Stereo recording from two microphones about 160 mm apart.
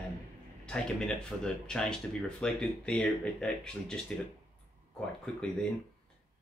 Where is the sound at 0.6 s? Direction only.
5° left (ahead or behind).